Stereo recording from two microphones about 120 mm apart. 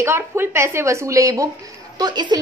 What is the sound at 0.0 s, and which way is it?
A woman's voice, 20° right (ahead or behind).